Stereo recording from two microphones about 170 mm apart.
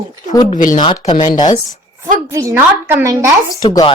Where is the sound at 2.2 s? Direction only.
20° right (ahead or behind).